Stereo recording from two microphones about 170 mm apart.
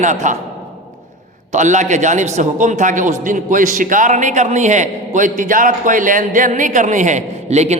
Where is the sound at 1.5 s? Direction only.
45° right (ahead or behind).